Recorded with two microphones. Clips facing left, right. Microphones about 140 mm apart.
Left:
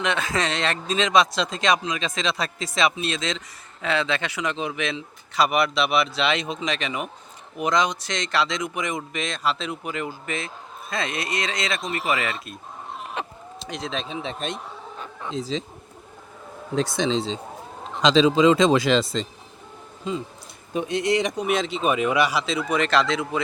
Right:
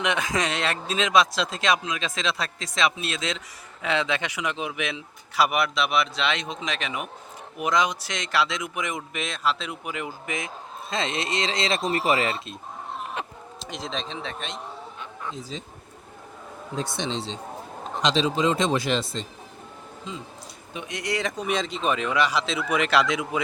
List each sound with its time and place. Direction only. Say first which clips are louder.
0.0 s speech: left 1 dB; 15° right (ahead or behind); by 12.5 s 30° right (ahead or behind)
13.6 s speech: left 2 dB; centre (ahead or behind)
14.4 s speech: left 6 dB; 40° left (ahead or behind)
15.3 s speech: left 9 dB; 90° left
16.7 s speech: left 6 dB; 90° left
18.3 s speech: left 6 dB; 90° left
20.7 s speech: left 7 dB; 30° left (ahead or behind); by 23.4 s 10° right (ahead or behind)